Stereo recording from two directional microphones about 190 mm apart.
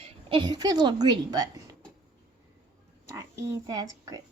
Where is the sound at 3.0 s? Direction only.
15° right (ahead or behind).